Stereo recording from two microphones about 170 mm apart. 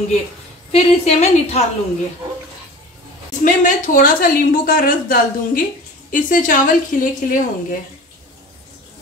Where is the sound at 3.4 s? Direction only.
50° left (ahead or behind).